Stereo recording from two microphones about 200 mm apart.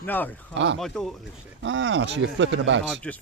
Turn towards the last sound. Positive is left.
turn(degrees=5)  # may be behind; listen again after turning